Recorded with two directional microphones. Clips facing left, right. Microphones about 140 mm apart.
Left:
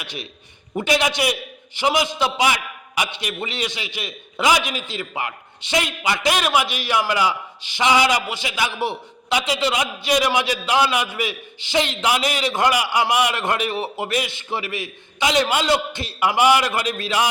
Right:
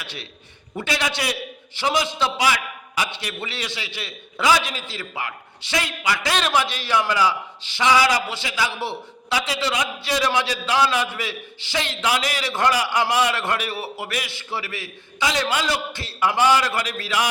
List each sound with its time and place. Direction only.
0.0 s a man's voice: 15° left (ahead or behind)